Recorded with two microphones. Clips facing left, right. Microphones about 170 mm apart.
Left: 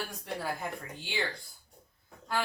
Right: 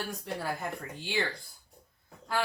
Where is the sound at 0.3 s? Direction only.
Centre (ahead or behind).